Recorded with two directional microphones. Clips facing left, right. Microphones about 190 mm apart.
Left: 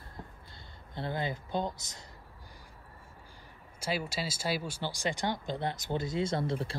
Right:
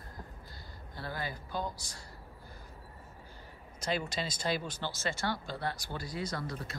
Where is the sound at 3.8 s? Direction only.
5° left (ahead or behind); by 6.8 s 25° left (ahead or behind).